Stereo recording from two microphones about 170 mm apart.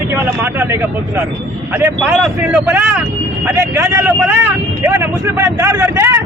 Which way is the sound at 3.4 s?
15° right (ahead or behind).